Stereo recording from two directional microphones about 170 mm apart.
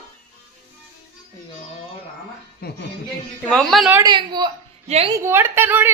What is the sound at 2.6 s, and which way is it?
Music, 65° left (ahead or behind).